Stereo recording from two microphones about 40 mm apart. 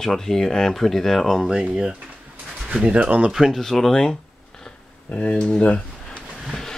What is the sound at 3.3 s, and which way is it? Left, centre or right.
Speech, centre.